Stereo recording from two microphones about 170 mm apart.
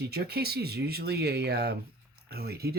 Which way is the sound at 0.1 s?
70° right (ahead or behind).